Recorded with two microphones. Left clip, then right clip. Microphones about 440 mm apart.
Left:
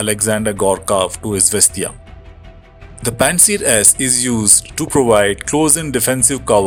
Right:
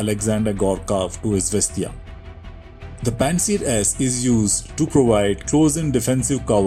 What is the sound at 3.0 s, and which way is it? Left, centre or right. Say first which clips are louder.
Speech: left 6 dB; left.